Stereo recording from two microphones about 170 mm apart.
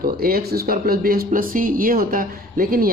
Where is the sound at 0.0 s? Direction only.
60° right (ahead or behind).